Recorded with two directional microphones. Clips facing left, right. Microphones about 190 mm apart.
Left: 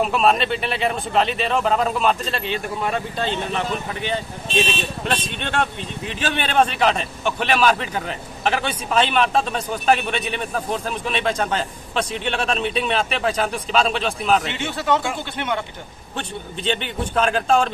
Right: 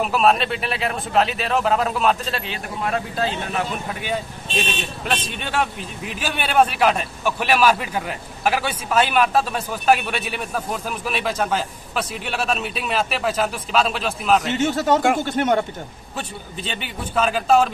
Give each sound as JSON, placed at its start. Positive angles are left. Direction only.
{"t": 0.0, "sound": "speech", "side_deg": 0}
{"t": 5.4, "sound": "speech", "side_deg": -5}
{"t": 14.5, "sound": "speech", "side_deg": -40}
{"t": 16.2, "sound": "speech", "side_deg": -5}